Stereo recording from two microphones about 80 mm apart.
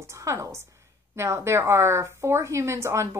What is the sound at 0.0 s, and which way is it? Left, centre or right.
A woman's voice, right.